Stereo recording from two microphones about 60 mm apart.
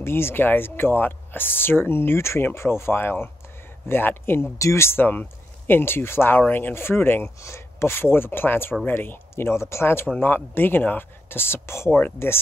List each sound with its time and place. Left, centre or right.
0.0 s speech: left
4.6 s speech: left
7.3 s speech: left
11.9 s speech: left